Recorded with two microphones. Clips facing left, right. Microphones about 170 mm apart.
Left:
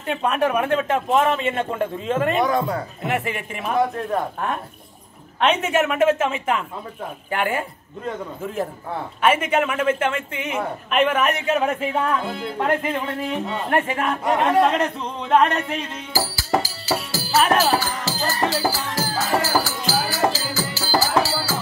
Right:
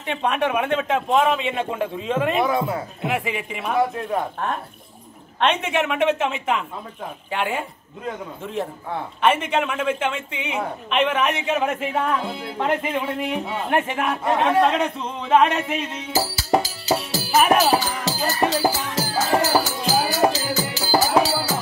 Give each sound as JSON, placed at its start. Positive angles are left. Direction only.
{"t": 0.0, "sound": "a woman's voice", "side_deg": 0}
{"t": 9.2, "sound": "a woman's voice", "side_deg": 5}
{"t": 16.1, "sound": "music", "side_deg": -20}